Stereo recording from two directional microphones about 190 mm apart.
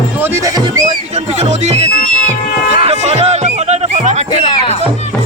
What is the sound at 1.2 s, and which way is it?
Speech, 35° right (ahead or behind).